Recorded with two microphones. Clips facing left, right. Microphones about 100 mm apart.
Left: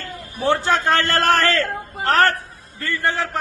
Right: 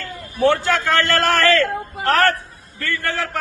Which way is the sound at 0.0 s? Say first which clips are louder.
Right 5 dB; 20° left (ahead or behind).